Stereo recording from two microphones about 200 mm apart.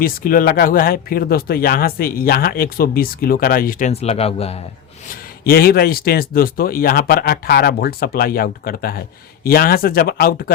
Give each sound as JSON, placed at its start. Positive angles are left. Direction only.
{"t": 0.0, "sound": "speech", "side_deg": 45}
{"t": 5.5, "sound": "speech", "side_deg": 50}